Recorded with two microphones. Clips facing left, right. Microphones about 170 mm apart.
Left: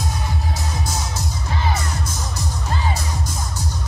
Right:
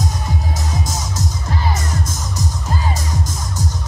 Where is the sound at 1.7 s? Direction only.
45° right (ahead or behind).